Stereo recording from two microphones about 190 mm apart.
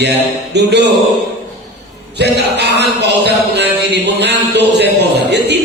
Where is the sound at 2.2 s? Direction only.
60° right (ahead or behind).